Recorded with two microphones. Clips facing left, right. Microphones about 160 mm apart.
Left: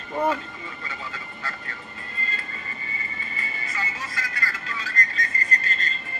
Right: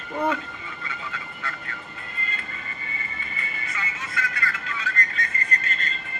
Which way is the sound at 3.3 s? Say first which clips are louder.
Left 2 dB; 35° left (ahead or behind).